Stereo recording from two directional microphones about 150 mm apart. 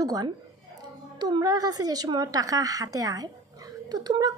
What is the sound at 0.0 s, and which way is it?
A woman's voice, 25° right (ahead or behind).